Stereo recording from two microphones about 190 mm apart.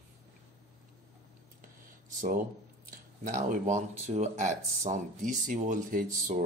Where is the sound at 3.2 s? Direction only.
40° right (ahead or behind).